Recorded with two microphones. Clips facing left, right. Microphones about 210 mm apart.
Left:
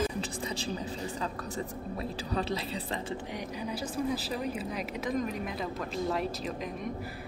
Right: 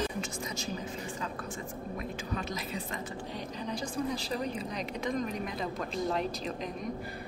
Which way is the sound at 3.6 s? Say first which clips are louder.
Even; 5° left (ahead or behind).